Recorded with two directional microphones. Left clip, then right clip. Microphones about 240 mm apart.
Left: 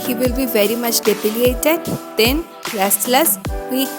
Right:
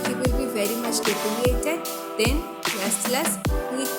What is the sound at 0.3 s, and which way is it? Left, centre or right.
Speech, left.